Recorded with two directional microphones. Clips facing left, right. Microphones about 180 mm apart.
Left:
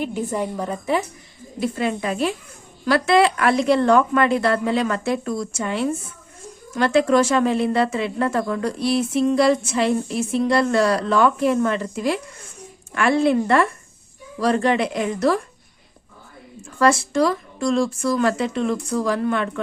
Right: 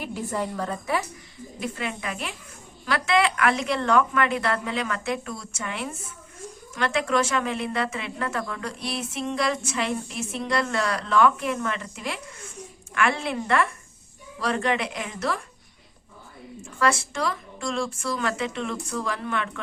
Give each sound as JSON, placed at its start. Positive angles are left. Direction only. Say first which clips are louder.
{"t": 0.0, "sound": "a woman's voice", "louder": "left 5 dB", "side_deg": 20}
{"t": 1.5, "sound": "speech", "louder": "left 8 dB", "side_deg": 35}
{"t": 16.8, "sound": "speech", "louder": "left 7 dB", "side_deg": 40}